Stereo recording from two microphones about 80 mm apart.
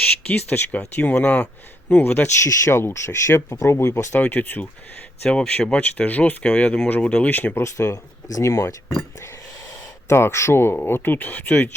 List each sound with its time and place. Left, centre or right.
0.2 s speech: centre
2.4 s speech: left
4.2 s speech: left
7.6 s speech: left
10.1 s speech: left